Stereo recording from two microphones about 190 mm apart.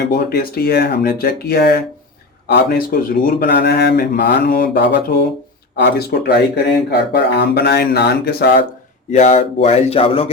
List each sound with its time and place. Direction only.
0.1 s speech: 55° left (ahead or behind)
9.0 s speech: 35° left (ahead or behind)